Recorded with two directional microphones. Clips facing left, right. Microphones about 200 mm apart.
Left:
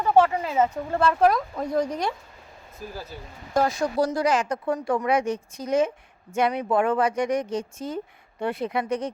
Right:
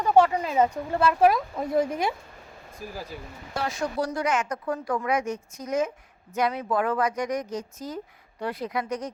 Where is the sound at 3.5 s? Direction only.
40° left (ahead or behind).